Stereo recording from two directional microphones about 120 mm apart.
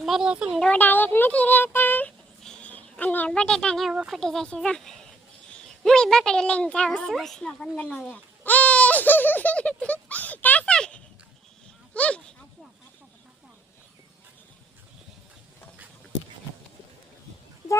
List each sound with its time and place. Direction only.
0.0 s speech: 5° right (ahead or behind)
0.6 s a woman's voice: 15° left (ahead or behind)